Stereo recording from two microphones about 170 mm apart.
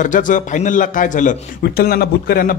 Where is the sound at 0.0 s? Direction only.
50° left (ahead or behind).